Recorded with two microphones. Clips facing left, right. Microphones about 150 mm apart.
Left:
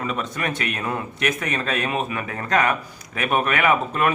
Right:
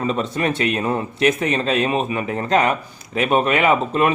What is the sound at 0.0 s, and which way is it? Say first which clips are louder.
Speech: right 5 dB; 30° right (ahead or behind).